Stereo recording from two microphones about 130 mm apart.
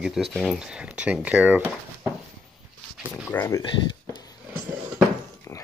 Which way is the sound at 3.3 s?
15° left (ahead or behind).